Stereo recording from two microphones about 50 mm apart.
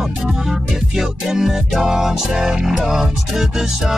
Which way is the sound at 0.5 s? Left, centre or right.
Centre.